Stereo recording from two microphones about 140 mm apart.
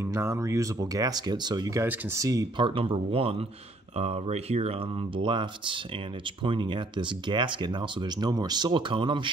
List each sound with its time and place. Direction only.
0.0 s speech: 20° right (ahead or behind); by 9.3 s 35° right (ahead or behind)